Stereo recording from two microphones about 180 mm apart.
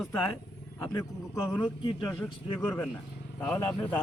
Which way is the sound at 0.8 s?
20° left (ahead or behind).